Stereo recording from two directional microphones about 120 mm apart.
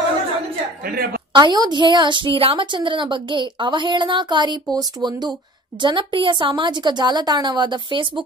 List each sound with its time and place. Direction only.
1.3 s a woman's voice: 35° right (ahead or behind)